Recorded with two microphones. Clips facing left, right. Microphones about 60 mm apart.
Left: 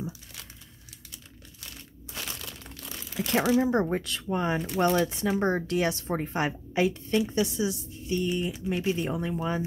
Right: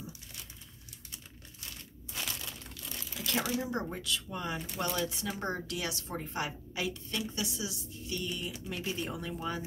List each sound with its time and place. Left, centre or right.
3.2 s speech: left